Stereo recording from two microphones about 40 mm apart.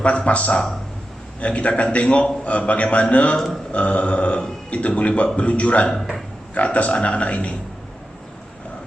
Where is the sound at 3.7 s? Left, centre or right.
Left.